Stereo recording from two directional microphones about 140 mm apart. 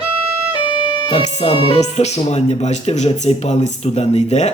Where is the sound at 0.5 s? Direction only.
35° left (ahead or behind).